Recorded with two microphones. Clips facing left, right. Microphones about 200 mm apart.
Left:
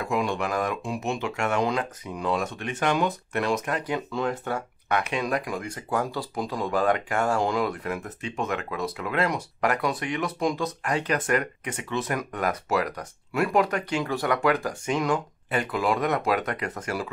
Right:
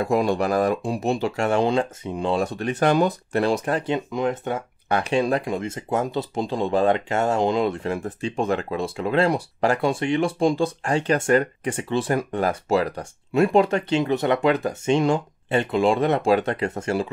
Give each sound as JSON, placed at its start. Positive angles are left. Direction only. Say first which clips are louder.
{"t": 0.0, "sound": "speech", "louder": "right 6 dB", "side_deg": -35}